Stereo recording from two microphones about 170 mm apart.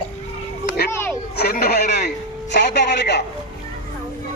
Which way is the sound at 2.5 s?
85° left.